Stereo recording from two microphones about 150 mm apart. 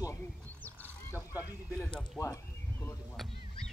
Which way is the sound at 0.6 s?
15° left (ahead or behind).